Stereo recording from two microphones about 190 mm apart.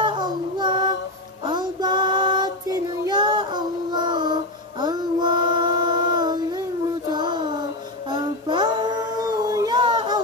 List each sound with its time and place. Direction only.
0.0 s child singing: 25° right (ahead or behind)